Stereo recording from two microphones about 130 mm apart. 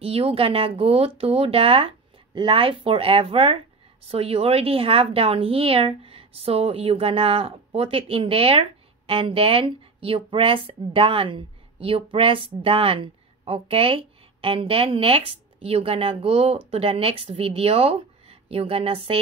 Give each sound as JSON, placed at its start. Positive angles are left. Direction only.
{"t": 0.0, "sound": "a woman's voice", "side_deg": -50}